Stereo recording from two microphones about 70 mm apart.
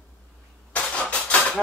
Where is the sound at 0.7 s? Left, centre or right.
Centre.